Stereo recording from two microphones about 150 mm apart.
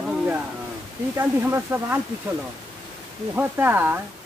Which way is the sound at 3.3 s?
15° right (ahead or behind).